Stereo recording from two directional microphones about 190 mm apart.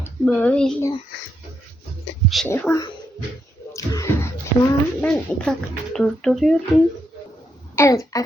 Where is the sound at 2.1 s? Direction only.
70° left (ahead or behind).